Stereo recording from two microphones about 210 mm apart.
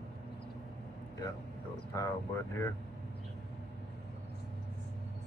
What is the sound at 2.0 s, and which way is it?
Speech, 15° left (ahead or behind).